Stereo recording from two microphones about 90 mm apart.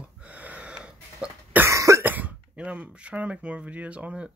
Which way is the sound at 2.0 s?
20° right (ahead or behind).